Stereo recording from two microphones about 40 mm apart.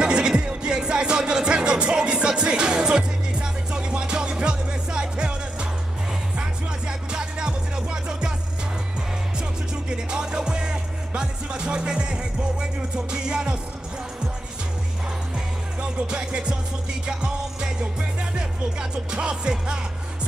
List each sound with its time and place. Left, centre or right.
0.0 s music: right
6.9 s music: right
9.8 s music: right
15.8 s music: right